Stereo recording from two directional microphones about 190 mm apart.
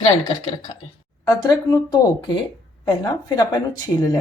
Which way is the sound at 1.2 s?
20° left (ahead or behind).